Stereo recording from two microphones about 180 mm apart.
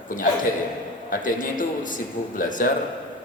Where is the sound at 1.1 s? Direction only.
45° left (ahead or behind).